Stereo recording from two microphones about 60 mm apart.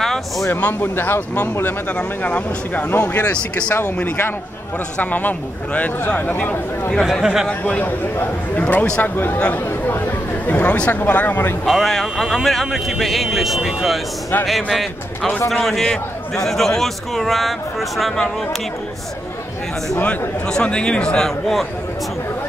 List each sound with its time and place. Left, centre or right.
0.0 s a sound: centre
0.5 s a man's voice: left
2.9 s speech: left
3.2 s a man's voice: centre
3.8 s speech: left
4.9 s a man's voice: left
7.1 s speech: centre
7.6 s a man's voice: left
9.7 s chatter: left
10.5 s speech: left
11.6 s speech: centre
20.0 s speech: left
20.4 s speech: centre